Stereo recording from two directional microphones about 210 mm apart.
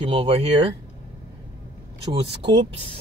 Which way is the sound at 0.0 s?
25° right (ahead or behind).